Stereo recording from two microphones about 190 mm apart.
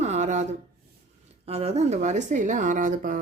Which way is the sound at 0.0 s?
40° right (ahead or behind).